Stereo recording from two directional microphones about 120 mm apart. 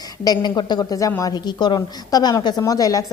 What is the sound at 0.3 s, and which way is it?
A woman's voice, 40° left (ahead or behind).